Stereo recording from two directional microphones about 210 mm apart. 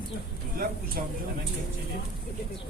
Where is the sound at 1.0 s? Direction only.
40° right (ahead or behind).